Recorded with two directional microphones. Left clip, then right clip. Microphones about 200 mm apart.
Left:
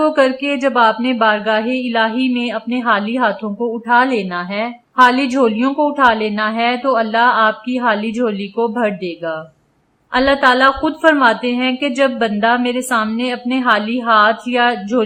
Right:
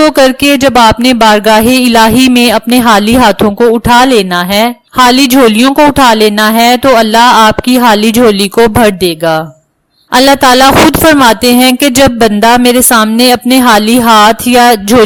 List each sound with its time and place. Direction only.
0.2 s a woman's voice: 50° right (ahead or behind)